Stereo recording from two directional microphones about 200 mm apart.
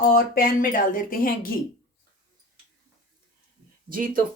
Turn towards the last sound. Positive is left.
turn(degrees=-45)  # may be behind; listen again after turning